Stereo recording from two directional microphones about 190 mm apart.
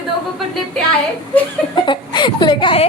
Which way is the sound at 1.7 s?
25° left (ahead or behind).